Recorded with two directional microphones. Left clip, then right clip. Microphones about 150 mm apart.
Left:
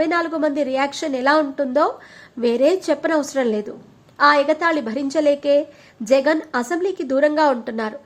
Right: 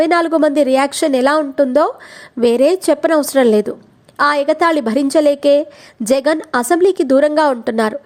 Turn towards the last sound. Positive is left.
turn(degrees=-45)  # may be behind; listen again after turning